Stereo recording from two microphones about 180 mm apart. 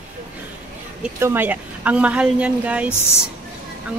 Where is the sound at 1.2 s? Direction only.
10° right (ahead or behind).